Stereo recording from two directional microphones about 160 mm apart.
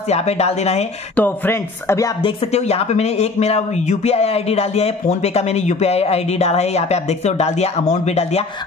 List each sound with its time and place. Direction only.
0.1 s speech: 40° left (ahead or behind)
1.1 s speech: 10° left (ahead or behind)
2.2 s speech: 40° left (ahead or behind)